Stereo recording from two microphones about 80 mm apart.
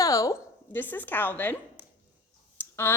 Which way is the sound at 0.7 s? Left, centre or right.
Left.